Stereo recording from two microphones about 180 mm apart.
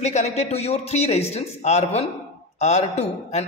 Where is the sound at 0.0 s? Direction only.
40° left (ahead or behind).